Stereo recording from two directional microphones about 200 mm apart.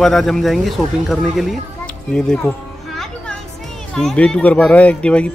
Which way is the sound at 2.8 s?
Centre (ahead or behind).